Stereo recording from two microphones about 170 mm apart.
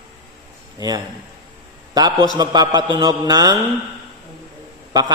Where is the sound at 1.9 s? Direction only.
20° right (ahead or behind).